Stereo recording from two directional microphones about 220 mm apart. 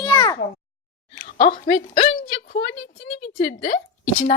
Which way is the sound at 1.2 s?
35° left (ahead or behind).